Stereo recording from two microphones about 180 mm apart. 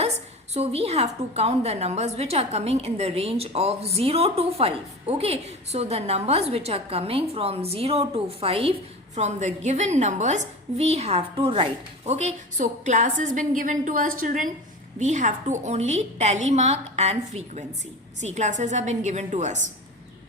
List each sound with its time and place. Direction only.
0.5 s a woman's voice: 35° right (ahead or behind)